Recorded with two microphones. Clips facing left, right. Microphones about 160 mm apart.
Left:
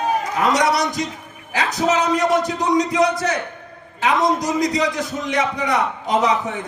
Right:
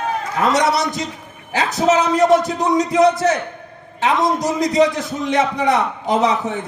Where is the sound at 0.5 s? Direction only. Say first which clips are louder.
Right 1 dB; 25° right (ahead or behind).